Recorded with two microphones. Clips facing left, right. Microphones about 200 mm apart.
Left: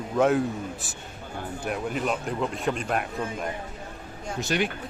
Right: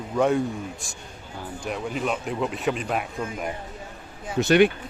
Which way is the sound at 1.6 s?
Centre (ahead or behind).